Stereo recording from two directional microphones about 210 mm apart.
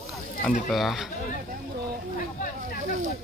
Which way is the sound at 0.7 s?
Centre (ahead or behind).